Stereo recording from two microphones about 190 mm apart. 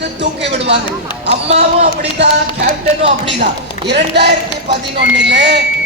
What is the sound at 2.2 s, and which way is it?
Speech, 65° right (ahead or behind).